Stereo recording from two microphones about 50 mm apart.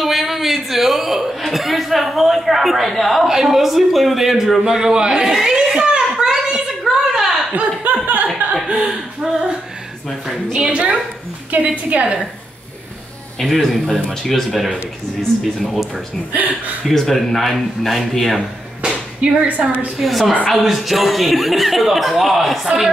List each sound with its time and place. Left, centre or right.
0.0 s a man's voice: centre
5.3 s a sound: centre
7.5 s speech: right
8.6 s a sound: centre
10.2 s a man's voice: centre
10.6 s a woman's voice: right
13.4 s a man's voice: centre
16.3 s speech: right
16.8 s a man's voice: centre
18.9 s a sound: centre
20.0 s a man's voice: centre